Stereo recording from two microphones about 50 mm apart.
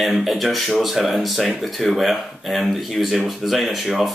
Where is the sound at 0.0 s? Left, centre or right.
Centre.